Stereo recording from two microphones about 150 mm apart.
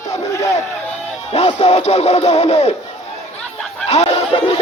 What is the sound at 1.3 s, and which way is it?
Music, 45° left (ahead or behind).